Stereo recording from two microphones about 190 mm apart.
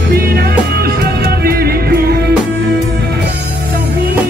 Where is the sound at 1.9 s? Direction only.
55° right (ahead or behind).